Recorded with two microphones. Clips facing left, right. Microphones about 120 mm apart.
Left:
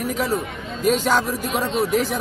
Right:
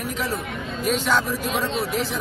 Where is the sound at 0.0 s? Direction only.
40° left (ahead or behind).